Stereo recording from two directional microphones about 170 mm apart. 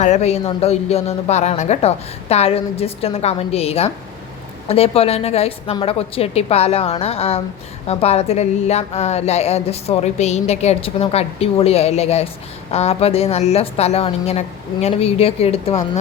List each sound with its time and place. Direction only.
0.0 s a woman's voice: 40° left (ahead or behind)